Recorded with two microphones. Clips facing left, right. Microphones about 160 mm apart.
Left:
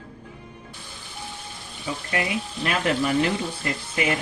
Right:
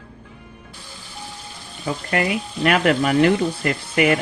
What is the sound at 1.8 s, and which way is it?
Speech, 60° right (ahead or behind).